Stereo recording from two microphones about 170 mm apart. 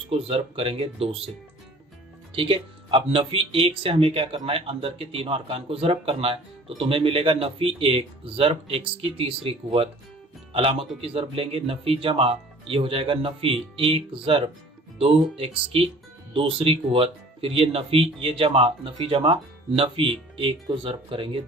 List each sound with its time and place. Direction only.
0.1 s speech: 35° right (ahead or behind)
2.3 s speech: 30° right (ahead or behind)